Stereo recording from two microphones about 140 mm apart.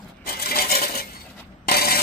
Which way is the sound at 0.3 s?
90° left.